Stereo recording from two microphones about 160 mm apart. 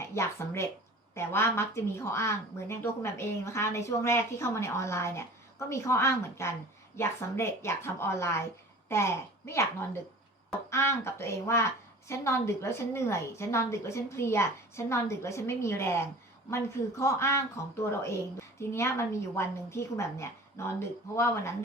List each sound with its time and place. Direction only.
0.0 s a woman's voice: 15° left (ahead or behind)